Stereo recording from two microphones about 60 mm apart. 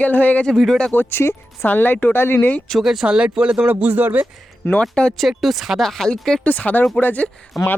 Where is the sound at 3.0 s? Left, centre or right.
Centre.